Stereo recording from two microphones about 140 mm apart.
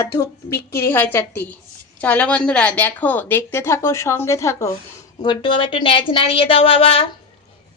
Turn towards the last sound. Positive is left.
turn(degrees=40)  # may be behind; listen again after turning